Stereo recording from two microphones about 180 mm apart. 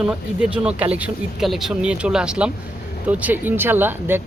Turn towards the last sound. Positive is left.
turn(degrees=-10)  # may be behind; listen again after turning